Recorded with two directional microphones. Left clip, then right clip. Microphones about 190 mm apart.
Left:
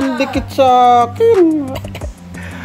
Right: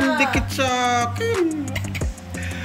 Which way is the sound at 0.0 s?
10° left (ahead or behind).